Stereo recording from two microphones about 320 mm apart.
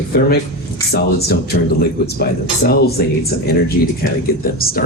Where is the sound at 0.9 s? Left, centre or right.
Left.